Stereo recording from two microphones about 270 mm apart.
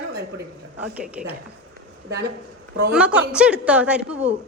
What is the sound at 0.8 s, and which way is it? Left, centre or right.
Speech, centre.